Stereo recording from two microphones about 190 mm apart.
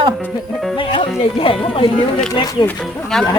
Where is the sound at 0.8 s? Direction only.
25° left (ahead or behind).